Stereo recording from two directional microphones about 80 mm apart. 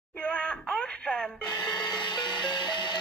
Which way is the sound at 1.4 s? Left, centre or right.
Left.